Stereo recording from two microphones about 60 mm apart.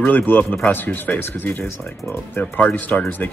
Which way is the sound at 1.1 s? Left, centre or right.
Left.